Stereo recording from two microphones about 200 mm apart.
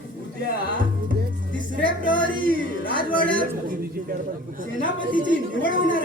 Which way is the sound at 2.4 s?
45° right (ahead or behind).